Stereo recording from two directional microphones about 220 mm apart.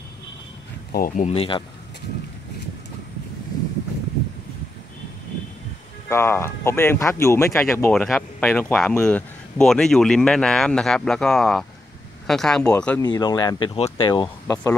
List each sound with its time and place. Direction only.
0.9 s speech: 35° left (ahead or behind)
6.0 s speech: 10° left (ahead or behind)
13.0 s speech: 20° left (ahead or behind)